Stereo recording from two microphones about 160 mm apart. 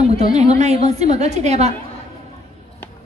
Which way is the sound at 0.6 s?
45° right (ahead or behind).